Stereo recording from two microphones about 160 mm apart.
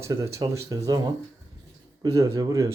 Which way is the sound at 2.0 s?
20° right (ahead or behind).